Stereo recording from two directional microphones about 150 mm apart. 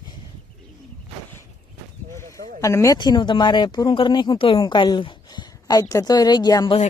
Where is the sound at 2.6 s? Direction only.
20° left (ahead or behind).